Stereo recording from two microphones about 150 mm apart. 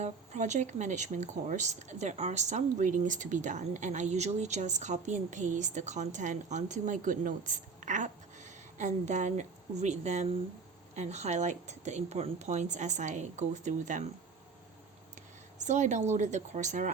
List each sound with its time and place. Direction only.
0.0 s speech: 50° right (ahead or behind)
15.5 s speech: 50° right (ahead or behind)